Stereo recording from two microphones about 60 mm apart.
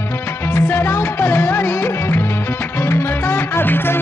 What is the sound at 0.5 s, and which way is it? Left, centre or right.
Music, left.